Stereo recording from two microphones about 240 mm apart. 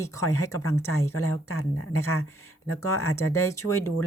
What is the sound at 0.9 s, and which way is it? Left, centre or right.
A woman's voice, left.